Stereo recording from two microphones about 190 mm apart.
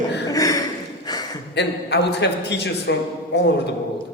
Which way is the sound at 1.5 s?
60° left (ahead or behind).